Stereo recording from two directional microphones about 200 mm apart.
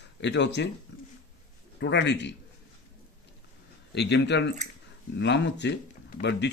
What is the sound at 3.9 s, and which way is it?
Speech, 60° left (ahead or behind).